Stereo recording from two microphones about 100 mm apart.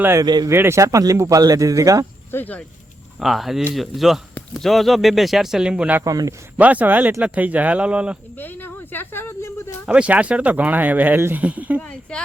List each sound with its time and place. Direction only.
0.2 s speech: 40° right (ahead or behind)
0.5 s speech: 25° right (ahead or behind)
2.3 s speech: 15° left (ahead or behind)
3.2 s speech: centre (ahead or behind)
6.1 s speech: 35° right (ahead or behind)
6.6 s speech: 15° right (ahead or behind)
8.4 s a sound: 20° left (ahead or behind)
9.8 s speech: 10° right (ahead or behind)
11.8 s speech: 10° left (ahead or behind)